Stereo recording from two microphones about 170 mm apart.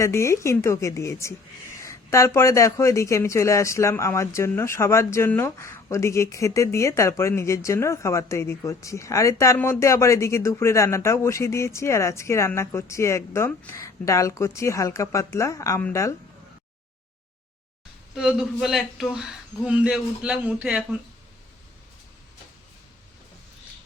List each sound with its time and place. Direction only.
0.0 s speech: 15° left (ahead or behind)
18.2 s a man's voice: 5° right (ahead or behind)